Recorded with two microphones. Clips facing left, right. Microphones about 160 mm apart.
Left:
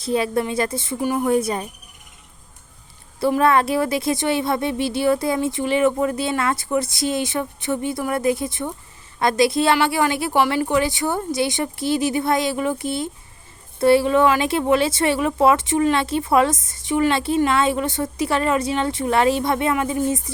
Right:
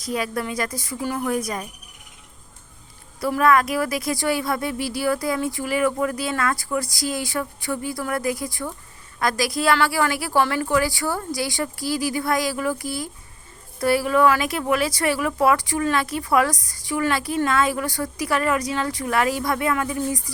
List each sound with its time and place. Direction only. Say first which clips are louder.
0.0 s speech: left 5 dB; 25° left (ahead or behind)
3.2 s speech: left 2 dB; 25° left (ahead or behind)